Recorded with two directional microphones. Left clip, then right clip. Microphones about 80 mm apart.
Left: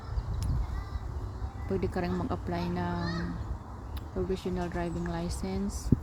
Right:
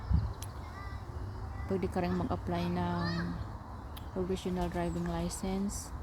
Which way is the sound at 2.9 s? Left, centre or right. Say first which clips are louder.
Left 1 dB; right.